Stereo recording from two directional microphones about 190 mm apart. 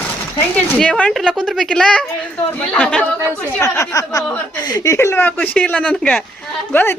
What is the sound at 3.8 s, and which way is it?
Speech, 15° left (ahead or behind).